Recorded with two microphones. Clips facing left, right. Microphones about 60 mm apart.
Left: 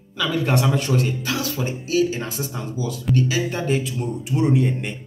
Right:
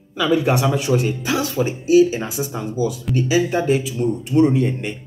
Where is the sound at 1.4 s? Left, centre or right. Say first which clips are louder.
Right 5 dB; right.